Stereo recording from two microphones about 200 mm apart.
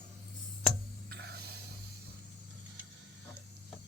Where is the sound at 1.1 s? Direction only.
55° right (ahead or behind).